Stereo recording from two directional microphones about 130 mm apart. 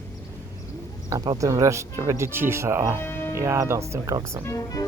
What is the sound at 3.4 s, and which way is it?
Speech, 20° right (ahead or behind).